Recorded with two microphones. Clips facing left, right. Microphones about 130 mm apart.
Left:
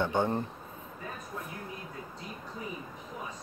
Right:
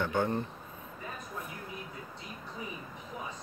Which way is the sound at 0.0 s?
25° left (ahead or behind).